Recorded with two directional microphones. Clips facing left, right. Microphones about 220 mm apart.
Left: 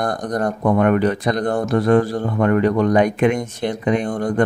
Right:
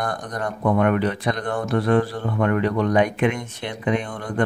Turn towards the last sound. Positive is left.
turn(degrees=45)  # may be behind; listen again after turning